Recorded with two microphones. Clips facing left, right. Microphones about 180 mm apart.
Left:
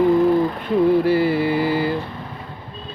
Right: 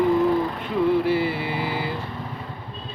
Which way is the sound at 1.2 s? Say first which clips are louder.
Left 7 dB; 45° left (ahead or behind).